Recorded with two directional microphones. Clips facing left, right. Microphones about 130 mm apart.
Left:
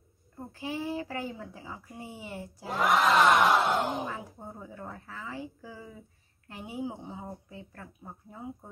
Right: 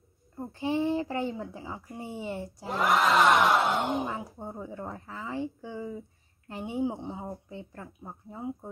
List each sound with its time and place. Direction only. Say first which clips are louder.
0.5 s a child's voice: right 7 dB; 30° right (ahead or behind)
2.7 s battle cry: even; centre (ahead or behind)
4.1 s a woman's voice: right 4 dB; 30° right (ahead or behind)